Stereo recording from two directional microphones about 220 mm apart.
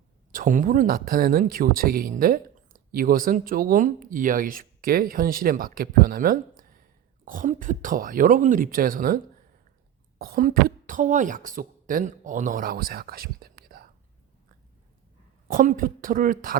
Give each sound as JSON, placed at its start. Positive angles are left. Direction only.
{"t": 0.3, "sound": "a woman's voice", "side_deg": -35}
{"t": 15.4, "sound": "speech", "side_deg": -40}